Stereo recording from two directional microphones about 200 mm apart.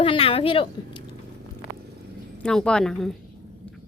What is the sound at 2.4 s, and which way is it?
Speech, 5° left (ahead or behind).